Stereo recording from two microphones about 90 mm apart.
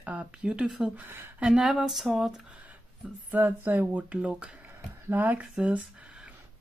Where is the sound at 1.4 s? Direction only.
5° right (ahead or behind).